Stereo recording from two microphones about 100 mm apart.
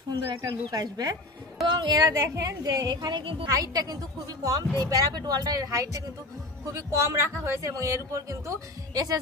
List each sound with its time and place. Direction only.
0.4 s a man's voice: 35° right (ahead or behind)
2.1 s a man's voice: 30° right (ahead or behind); by 3.4 s 60° right (ahead or behind)
3.5 s a man's voice: 35° right (ahead or behind)